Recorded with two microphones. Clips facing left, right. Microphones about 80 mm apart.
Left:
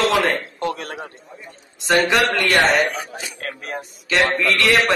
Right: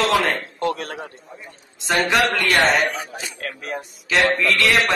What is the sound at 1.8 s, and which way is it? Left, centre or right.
A man's voice, centre.